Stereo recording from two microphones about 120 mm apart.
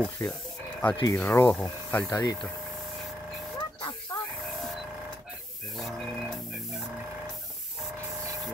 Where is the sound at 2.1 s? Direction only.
30° left (ahead or behind).